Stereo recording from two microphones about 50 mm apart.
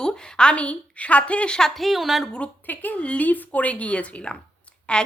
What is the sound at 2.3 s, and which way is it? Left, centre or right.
Speech, left.